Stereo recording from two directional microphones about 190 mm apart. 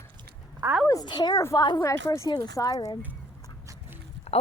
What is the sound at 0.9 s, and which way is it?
A woman's voice, 20° left (ahead or behind).